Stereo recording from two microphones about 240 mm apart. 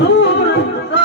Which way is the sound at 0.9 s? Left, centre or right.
Left.